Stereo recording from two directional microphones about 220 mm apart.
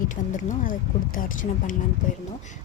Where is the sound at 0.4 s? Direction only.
35° left (ahead or behind).